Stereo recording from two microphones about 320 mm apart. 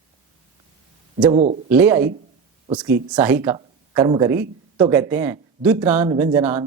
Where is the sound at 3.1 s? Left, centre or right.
Centre.